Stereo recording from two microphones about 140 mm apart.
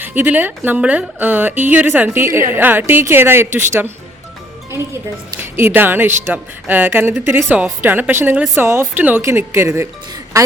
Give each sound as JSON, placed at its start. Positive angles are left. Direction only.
{"t": 0.0, "sound": "speech", "side_deg": -15}
{"t": 5.4, "sound": "speech", "side_deg": -15}